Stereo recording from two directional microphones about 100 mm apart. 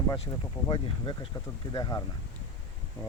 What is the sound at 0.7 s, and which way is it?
Speech, 50° left (ahead or behind).